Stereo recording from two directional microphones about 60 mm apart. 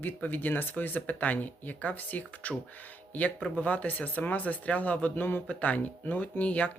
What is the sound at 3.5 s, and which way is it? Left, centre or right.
Speech, left.